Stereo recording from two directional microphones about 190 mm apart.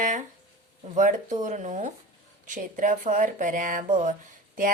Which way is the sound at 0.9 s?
40° right (ahead or behind).